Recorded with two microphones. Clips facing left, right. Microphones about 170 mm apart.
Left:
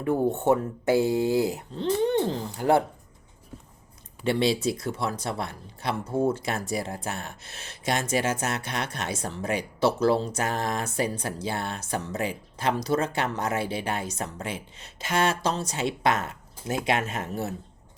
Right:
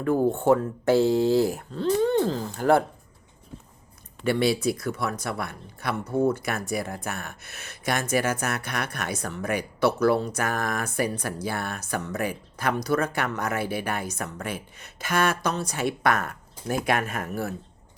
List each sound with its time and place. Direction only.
0.0 s speech: 20° left (ahead or behind)
4.2 s speech: 25° left (ahead or behind)